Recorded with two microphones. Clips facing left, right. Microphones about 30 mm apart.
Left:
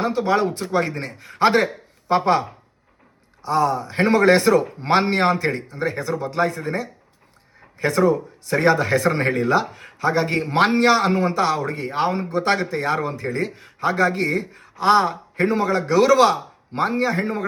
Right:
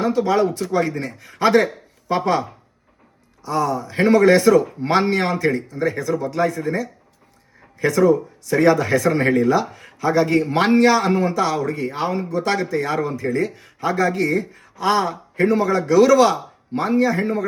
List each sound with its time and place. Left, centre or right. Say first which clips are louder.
0.0 s a man's voice: right 2 dB; left